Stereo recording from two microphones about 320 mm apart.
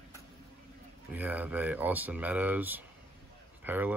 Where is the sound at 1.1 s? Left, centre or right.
Centre.